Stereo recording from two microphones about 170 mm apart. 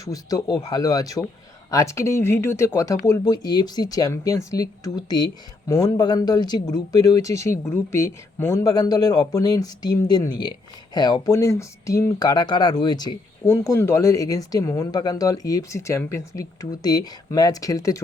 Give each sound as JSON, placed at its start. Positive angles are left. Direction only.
{"t": 0.0, "sound": "speech", "side_deg": 20}
{"t": 13.5, "sound": "speech", "side_deg": 15}